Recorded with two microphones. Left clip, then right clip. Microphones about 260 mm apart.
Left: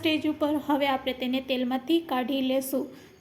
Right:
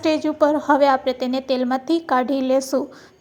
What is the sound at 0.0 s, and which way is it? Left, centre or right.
A woman's voice, centre.